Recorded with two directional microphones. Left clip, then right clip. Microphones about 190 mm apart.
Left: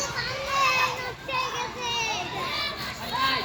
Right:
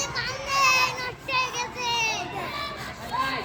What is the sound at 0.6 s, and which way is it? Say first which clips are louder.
Child singing: right 3 dB; 35° right (ahead or behind).